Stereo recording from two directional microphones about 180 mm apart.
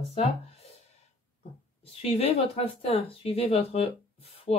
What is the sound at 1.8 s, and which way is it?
Speech, 35° left (ahead or behind).